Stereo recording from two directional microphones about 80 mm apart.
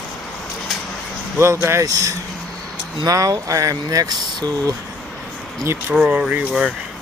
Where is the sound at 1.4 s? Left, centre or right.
Right.